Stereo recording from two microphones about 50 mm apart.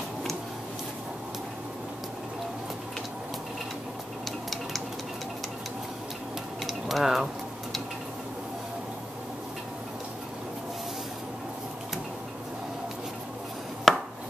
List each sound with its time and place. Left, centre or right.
6.6 s mechanisms: centre
13.9 s chopping: centre